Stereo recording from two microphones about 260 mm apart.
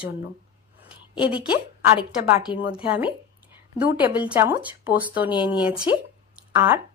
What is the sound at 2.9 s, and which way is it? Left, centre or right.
A woman's voice, centre.